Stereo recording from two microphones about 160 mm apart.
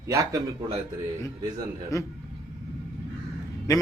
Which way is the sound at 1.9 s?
20° left (ahead or behind).